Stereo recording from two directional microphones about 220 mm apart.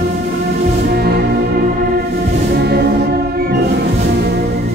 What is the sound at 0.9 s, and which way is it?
Music, 45° right (ahead or behind).